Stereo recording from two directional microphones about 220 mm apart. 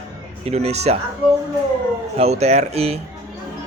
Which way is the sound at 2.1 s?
30° right (ahead or behind).